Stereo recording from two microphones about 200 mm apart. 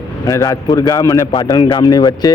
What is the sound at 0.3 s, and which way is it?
Speech, 15° left (ahead or behind).